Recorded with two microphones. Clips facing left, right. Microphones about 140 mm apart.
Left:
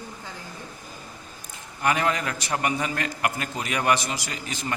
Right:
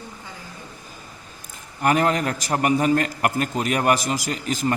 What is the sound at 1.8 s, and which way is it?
A man's voice, 40° right (ahead or behind).